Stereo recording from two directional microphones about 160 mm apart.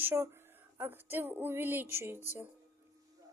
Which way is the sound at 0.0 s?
15° right (ahead or behind).